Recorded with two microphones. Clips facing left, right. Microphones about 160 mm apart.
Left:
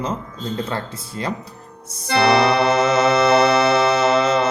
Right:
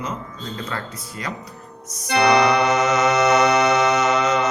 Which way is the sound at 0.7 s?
30° left (ahead or behind).